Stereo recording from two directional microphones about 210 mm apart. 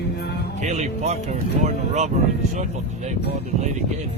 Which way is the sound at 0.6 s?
30° right (ahead or behind).